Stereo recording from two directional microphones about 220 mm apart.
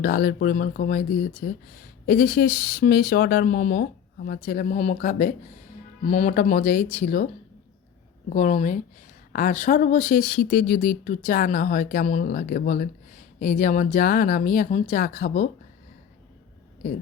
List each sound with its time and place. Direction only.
0.0 s speech: 40° left (ahead or behind)
8.3 s speech: 35° left (ahead or behind)